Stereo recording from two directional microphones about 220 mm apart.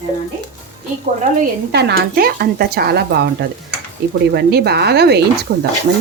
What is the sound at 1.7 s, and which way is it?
Speech, 50° right (ahead or behind).